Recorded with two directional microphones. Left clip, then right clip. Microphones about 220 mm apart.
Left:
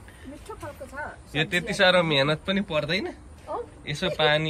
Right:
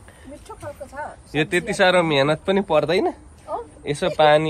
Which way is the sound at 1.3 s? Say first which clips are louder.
Right 4 dB; 5° left (ahead or behind).